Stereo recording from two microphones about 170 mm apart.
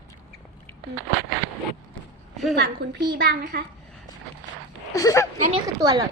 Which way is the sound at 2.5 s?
70° right (ahead or behind).